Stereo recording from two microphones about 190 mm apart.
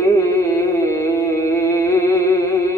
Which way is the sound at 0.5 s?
15° left (ahead or behind).